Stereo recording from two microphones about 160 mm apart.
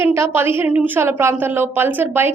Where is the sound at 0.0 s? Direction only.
15° right (ahead or behind).